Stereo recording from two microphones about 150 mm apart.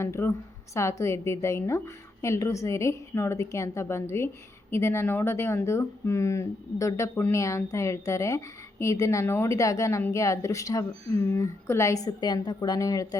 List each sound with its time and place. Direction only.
0.0 s speech: 15° left (ahead or behind)